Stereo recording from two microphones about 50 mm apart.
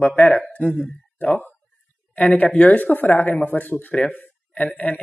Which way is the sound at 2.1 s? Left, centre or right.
Left.